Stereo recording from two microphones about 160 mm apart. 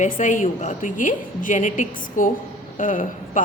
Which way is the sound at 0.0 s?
50° left (ahead or behind).